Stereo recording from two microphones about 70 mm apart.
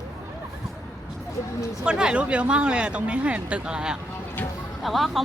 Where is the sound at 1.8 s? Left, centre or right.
Centre.